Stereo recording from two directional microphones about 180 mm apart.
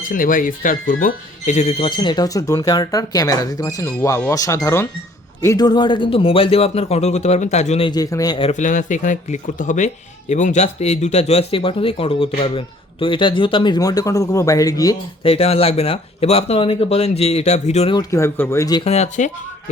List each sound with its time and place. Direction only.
0.1 s speech: 50° left (ahead or behind)
7.9 s speech: 20° left (ahead or behind)
8.5 s speech: 45° left (ahead or behind); by 14.9 s 20° left (ahead or behind)
15.2 s speech: 35° left (ahead or behind)
17.9 s speech: 15° left (ahead or behind)
18.9 s speech: 40° left (ahead or behind)